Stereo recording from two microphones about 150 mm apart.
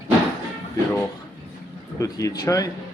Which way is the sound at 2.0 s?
25° left (ahead or behind).